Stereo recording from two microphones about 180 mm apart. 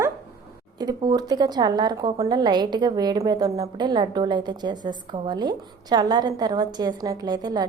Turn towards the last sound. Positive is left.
turn(degrees=-20)  # may be behind; listen again after turning